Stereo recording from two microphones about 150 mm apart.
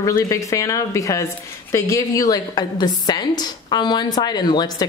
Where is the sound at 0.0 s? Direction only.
20° left (ahead or behind).